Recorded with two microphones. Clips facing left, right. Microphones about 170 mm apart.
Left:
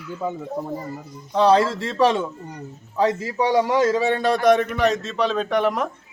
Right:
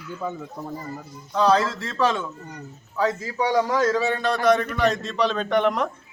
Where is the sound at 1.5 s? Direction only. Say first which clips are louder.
Left 4 dB; 30° left (ahead or behind).